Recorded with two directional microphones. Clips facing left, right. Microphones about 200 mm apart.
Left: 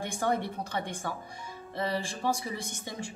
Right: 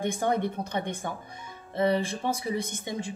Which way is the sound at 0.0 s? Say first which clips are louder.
Right 3 dB; 20° right (ahead or behind).